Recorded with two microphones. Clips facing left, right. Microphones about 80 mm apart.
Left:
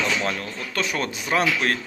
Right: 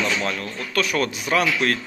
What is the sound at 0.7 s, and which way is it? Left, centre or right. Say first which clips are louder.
Speech: right 4 dB; left.